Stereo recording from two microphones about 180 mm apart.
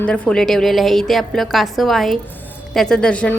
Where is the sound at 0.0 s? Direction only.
5° left (ahead or behind).